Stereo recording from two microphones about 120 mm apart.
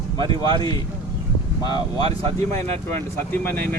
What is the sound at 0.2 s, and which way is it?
Speech, 45° right (ahead or behind).